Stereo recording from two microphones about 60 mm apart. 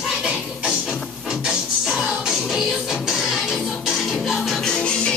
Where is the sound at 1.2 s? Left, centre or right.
Centre.